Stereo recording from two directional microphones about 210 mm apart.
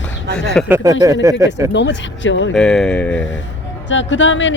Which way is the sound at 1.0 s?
15° right (ahead or behind).